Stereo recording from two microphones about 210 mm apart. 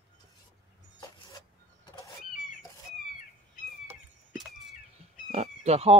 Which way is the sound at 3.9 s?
Centre (ahead or behind).